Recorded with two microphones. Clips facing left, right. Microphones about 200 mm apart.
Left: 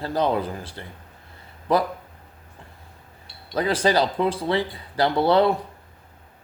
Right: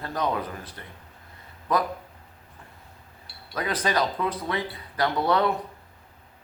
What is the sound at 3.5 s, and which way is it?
Speech, 30° left (ahead or behind).